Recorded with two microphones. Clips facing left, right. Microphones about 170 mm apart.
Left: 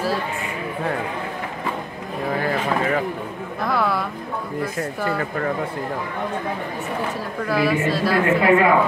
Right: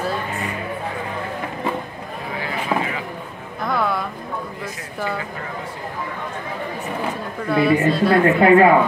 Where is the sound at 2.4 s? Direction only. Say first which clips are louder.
Even; 50° left (ahead or behind).